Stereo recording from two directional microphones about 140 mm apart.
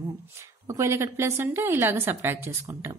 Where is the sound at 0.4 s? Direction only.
20° right (ahead or behind).